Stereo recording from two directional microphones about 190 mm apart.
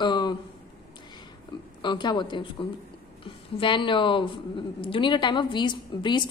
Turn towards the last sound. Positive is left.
turn(degrees=25)  # may be behind; listen again after turning